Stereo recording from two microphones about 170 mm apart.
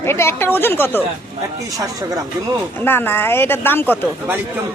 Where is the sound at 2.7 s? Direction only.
10° left (ahead or behind).